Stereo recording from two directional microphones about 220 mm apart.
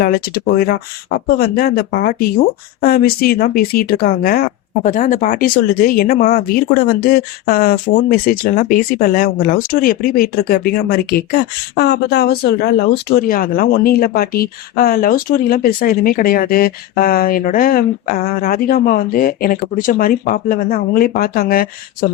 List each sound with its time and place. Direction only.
0.0 s speech: 45° left (ahead or behind)